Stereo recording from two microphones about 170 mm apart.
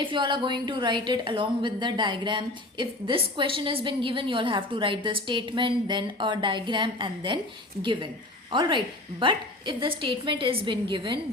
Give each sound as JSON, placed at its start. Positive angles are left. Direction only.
{"t": 0.0, "sound": "a woman's voice", "side_deg": -30}
{"t": 9.2, "sound": "a woman's voice", "side_deg": -30}